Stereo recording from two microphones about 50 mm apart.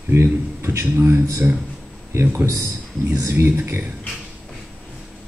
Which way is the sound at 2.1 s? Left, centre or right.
Right.